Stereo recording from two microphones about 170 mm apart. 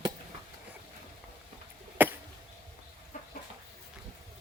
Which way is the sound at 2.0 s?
10° right (ahead or behind).